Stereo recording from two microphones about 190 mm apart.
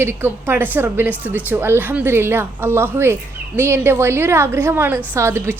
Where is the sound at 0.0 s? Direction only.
10° right (ahead or behind).